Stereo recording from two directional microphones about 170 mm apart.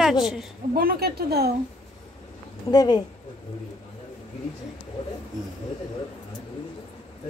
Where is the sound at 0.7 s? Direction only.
65° right (ahead or behind).